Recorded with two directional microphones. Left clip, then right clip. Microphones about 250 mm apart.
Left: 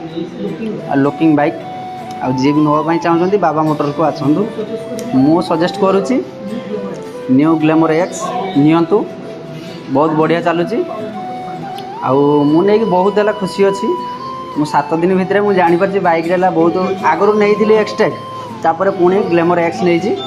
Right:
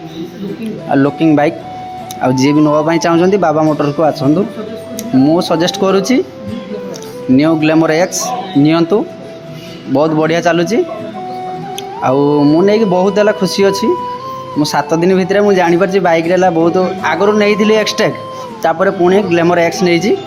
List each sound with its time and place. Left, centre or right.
0.9 s a man's voice: right
5.3 s a man's voice: right
7.3 s a man's voice: right
12.0 s a man's voice: right